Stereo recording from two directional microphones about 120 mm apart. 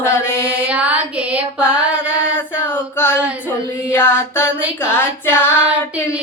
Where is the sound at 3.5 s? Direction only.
20° left (ahead or behind).